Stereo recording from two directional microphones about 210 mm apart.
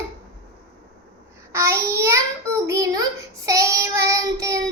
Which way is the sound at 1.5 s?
10° right (ahead or behind).